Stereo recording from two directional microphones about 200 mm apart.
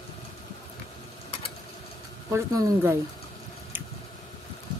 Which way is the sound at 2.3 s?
15° right (ahead or behind).